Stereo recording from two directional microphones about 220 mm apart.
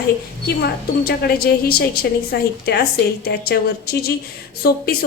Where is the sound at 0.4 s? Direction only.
45° left (ahead or behind).